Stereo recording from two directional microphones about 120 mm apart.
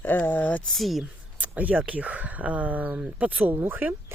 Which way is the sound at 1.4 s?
10° right (ahead or behind).